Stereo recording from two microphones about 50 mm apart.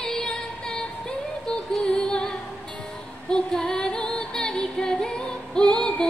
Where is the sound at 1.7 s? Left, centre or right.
Centre.